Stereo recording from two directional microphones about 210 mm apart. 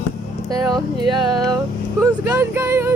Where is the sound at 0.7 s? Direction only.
20° right (ahead or behind).